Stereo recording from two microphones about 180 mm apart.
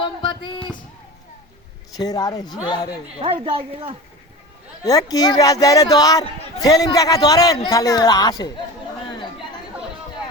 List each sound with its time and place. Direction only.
0.0 s a sound: 25° left (ahead or behind)
2.0 s speech: 20° left (ahead or behind)
3.2 s speech: 30° right (ahead or behind)
4.8 s speech: 20° left (ahead or behind)